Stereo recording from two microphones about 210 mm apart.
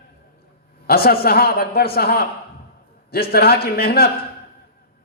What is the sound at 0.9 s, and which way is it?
A man's voice, 45° left (ahead or behind).